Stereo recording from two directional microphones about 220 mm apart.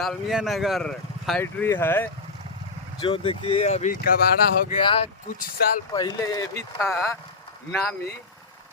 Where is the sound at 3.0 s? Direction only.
25° left (ahead or behind).